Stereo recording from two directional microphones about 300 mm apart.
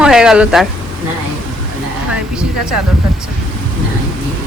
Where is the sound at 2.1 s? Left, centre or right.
Centre.